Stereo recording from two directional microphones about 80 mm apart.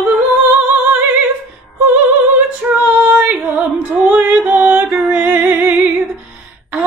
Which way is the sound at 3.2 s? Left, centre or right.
Right.